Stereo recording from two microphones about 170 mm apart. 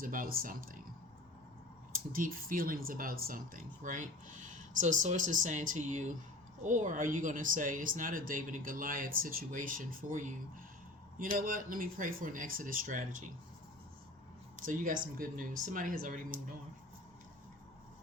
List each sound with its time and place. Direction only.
0.0 s speech: 55° right (ahead or behind)
2.1 s speech: 55° right (ahead or behind)
14.6 s speech: 55° right (ahead or behind)